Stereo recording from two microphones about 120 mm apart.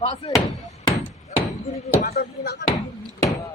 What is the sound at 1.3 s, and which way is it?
Speech, 85° left.